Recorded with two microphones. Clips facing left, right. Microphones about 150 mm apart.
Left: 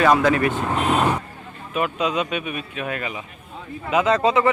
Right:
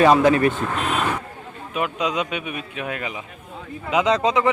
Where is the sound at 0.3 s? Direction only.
30° right (ahead or behind).